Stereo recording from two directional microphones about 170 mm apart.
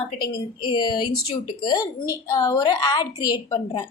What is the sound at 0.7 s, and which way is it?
A woman's voice, 25° left (ahead or behind).